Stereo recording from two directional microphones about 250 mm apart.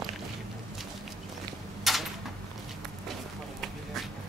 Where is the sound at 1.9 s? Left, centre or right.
Centre.